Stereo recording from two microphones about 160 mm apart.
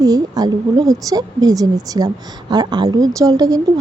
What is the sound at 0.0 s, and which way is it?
A woman's voice, 25° right (ahead or behind).